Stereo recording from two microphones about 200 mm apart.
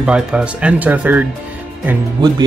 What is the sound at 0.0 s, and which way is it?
Speech, 5° right (ahead or behind).